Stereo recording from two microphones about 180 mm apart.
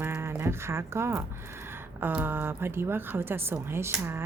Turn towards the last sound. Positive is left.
turn(degrees=-15)  # may be behind; listen again after turning